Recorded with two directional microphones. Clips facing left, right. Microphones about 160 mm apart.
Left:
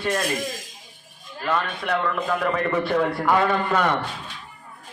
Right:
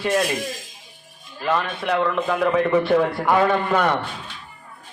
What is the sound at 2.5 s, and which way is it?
A man's voice, 5° right (ahead or behind).